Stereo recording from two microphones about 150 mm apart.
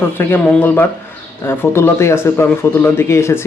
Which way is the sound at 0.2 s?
15° left (ahead or behind).